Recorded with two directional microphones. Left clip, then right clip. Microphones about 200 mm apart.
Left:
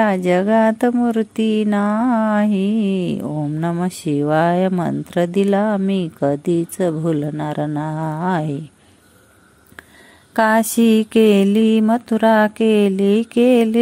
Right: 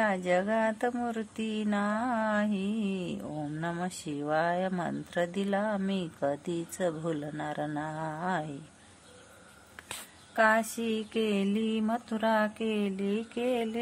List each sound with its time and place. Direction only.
0.0 s speech: 40° left (ahead or behind)
10.3 s speech: 50° left (ahead or behind)